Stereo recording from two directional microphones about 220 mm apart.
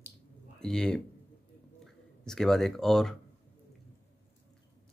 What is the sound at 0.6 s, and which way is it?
Speech, 5° left (ahead or behind).